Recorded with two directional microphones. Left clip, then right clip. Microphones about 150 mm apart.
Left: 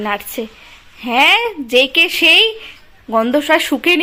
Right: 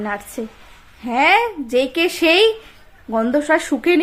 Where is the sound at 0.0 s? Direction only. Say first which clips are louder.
Left 5 dB; 5° left (ahead or behind).